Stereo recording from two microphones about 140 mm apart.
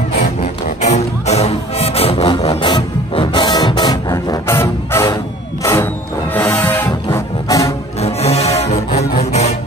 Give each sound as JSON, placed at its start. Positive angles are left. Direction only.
{"t": 0.7, "sound": "music", "side_deg": 55}
{"t": 4.1, "sound": "music", "side_deg": 20}
{"t": 7.4, "sound": "music", "side_deg": 25}
{"t": 8.0, "sound": "music", "side_deg": 50}